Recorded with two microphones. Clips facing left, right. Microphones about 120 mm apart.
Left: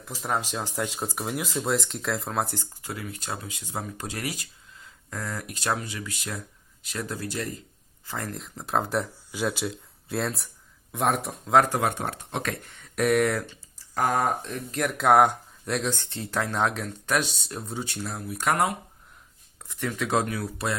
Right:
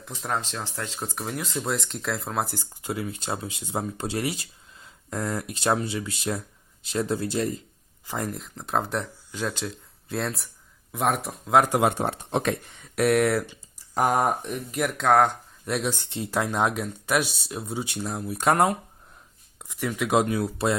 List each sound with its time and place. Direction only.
0.0 s speech: 5° left (ahead or behind)
2.8 s speech: 25° right (ahead or behind)
8.0 s speech: 15° right (ahead or behind)
8.4 s speech: centre (ahead or behind)
11.7 s speech: 20° right (ahead or behind)
13.0 s speech: centre (ahead or behind)
13.5 s speech: 15° right (ahead or behind)
14.8 s speech: 5° left (ahead or behind)
15.6 s speech: 5° right (ahead or behind)
18.3 s speech: 30° right (ahead or behind)
19.5 s speech: 15° right (ahead or behind)